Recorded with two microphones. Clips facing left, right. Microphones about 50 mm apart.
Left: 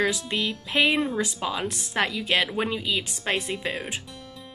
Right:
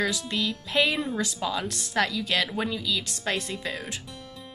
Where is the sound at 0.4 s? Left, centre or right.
Centre.